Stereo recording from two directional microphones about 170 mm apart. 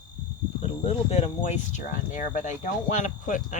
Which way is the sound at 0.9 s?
40° left (ahead or behind).